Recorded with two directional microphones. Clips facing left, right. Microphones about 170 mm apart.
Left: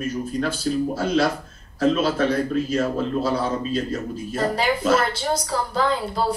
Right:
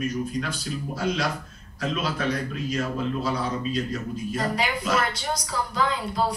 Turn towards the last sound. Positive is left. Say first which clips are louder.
# left 3 dB
turn(degrees=30)  # may be behind; listen again after turning